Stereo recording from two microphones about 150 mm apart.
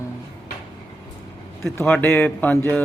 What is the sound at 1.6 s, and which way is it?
Speech, 5° left (ahead or behind).